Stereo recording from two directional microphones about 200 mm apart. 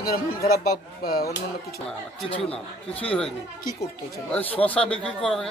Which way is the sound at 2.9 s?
5° left (ahead or behind).